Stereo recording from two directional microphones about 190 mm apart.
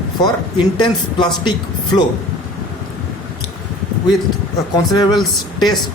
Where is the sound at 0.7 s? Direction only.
25° left (ahead or behind).